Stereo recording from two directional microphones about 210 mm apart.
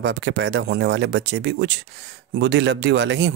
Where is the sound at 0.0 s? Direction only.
55° right (ahead or behind).